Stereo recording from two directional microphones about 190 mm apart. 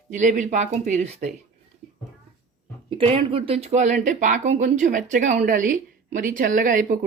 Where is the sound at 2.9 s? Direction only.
30° right (ahead or behind).